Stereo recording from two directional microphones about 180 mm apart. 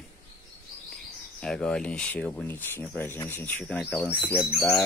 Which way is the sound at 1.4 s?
5° left (ahead or behind).